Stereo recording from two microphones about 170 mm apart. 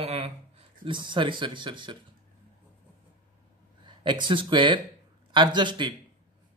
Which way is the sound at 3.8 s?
25° right (ahead or behind).